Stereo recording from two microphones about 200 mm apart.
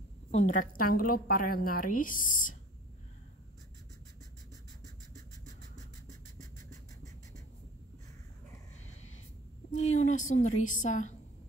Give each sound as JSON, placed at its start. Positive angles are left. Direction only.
{"t": 0.3, "sound": "a woman's voice", "side_deg": 35}
{"t": 9.7, "sound": "a woman's voice", "side_deg": 35}